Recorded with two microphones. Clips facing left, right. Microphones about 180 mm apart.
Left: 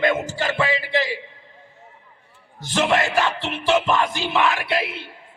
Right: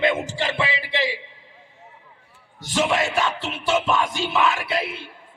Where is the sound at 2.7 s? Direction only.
60° left (ahead or behind).